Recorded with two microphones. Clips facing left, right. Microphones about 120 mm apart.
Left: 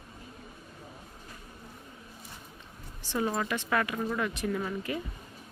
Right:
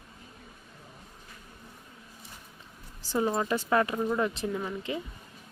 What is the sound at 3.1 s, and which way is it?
Speech, 25° right (ahead or behind).